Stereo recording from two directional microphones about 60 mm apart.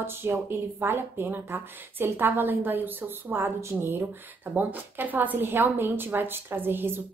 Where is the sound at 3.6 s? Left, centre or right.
Right.